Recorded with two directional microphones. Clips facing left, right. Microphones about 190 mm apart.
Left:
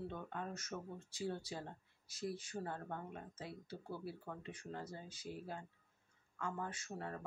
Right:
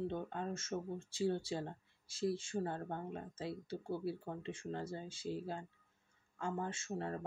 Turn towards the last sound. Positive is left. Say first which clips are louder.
# right 5 dB
turn(degrees=-30)  # may be behind; listen again after turning